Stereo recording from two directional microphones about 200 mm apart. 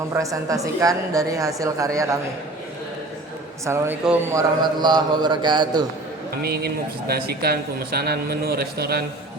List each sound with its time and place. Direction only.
0.1 s a woman's voice: 15° right (ahead or behind)
3.7 s a man's voice: 10° right (ahead or behind)
6.4 s a man's voice: 50° right (ahead or behind)